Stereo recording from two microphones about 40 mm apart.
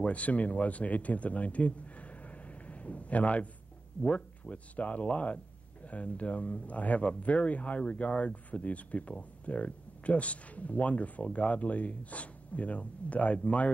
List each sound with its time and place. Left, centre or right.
0.0 s speech: left